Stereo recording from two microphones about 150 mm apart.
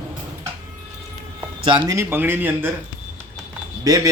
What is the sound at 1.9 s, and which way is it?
Speech, 15° right (ahead or behind).